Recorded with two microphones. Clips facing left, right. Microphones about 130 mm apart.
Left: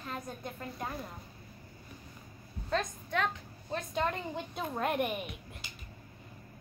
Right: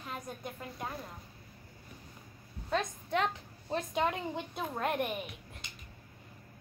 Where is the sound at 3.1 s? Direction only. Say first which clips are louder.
Right 2 dB; 25° right (ahead or behind).